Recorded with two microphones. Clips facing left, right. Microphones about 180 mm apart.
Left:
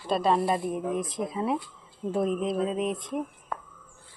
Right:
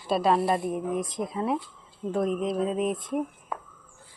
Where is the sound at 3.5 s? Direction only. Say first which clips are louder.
Left 1 dB; 5° right (ahead or behind).